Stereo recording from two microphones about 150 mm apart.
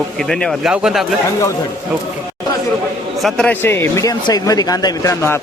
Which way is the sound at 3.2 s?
5° left (ahead or behind).